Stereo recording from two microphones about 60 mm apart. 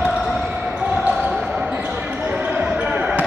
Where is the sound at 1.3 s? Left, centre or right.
Centre.